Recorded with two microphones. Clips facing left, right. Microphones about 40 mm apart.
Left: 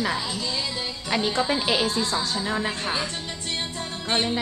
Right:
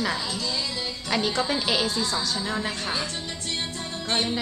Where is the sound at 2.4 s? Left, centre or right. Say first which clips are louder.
Left 2 dB; centre.